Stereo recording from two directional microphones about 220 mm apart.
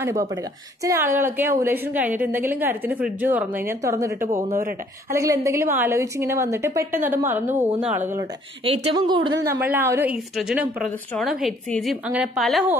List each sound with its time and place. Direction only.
0.8 s a woman's voice: 10° right (ahead or behind)
4.5 s speech: 35° right (ahead or behind)
5.1 s a woman's voice: 15° right (ahead or behind)
8.8 s a woman's voice: 20° right (ahead or behind); by 12.7 s centre (ahead or behind)